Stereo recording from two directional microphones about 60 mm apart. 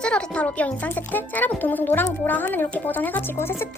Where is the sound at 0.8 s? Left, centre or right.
Left.